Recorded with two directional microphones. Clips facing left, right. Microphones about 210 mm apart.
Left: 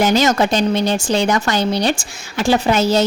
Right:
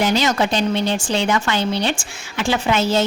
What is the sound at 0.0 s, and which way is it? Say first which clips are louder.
A woman's voice: left 4 dB; 45° left (ahead or behind).